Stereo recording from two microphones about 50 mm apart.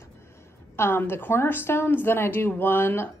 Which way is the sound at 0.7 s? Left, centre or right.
Left.